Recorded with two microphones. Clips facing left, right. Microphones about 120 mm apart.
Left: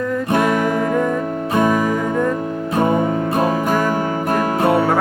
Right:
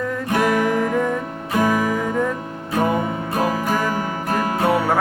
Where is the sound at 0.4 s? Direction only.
Centre (ahead or behind).